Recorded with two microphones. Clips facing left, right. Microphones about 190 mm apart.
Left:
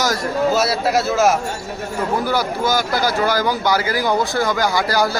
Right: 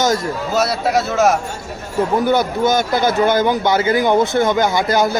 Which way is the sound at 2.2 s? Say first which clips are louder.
Right 4 dB; 20° right (ahead or behind).